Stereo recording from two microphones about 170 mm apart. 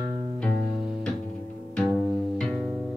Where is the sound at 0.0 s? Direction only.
25° right (ahead or behind).